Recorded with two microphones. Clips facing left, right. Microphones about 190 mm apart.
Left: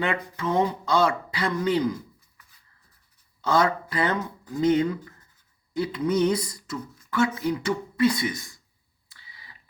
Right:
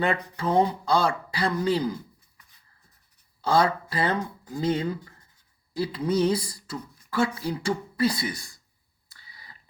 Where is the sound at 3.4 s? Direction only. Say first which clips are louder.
Even; 30° right (ahead or behind).